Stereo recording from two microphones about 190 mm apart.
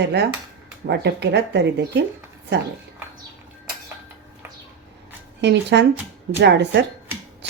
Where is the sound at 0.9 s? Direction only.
60° right (ahead or behind).